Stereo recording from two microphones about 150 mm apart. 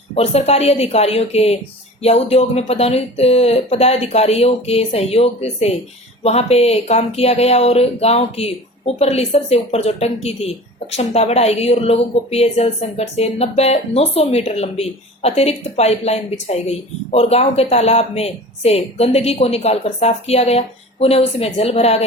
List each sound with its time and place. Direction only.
0.1 s speech: 45° left (ahead or behind)